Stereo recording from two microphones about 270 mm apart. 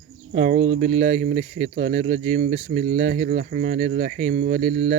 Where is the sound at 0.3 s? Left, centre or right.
Right.